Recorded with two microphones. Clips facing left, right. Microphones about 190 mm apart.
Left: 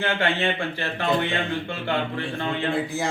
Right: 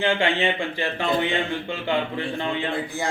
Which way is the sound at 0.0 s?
15° right (ahead or behind).